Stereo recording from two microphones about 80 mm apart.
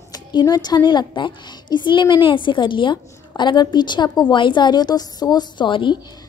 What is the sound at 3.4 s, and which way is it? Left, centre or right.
A child's voice, left.